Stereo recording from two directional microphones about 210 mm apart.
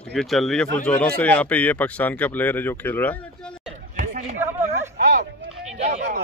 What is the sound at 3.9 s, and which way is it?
Chatter, 40° right (ahead or behind).